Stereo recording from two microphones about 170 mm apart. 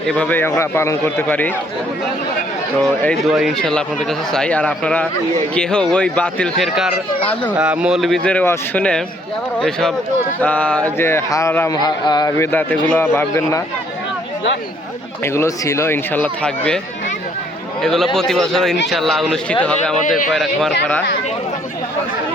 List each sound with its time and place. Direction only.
0.0 s speech: 5° left (ahead or behind)
3.2 s speech: centre (ahead or behind); by 12.5 s 25° left (ahead or behind)
12.5 s speech: 10° left (ahead or behind)
15.2 s speech: 15° left (ahead or behind)
17.8 s speech: centre (ahead or behind)